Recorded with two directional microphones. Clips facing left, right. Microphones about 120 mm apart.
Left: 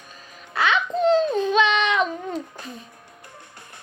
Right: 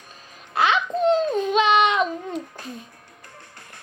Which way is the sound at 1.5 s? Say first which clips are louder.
Right 5 dB; 35° right (ahead or behind).